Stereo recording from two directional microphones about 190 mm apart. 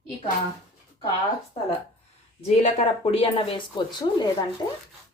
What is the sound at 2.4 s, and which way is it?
Speech, 30° left (ahead or behind).